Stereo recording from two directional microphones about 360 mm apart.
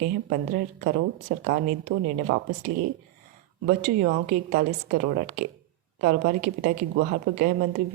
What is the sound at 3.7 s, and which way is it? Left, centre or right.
A woman's voice, right.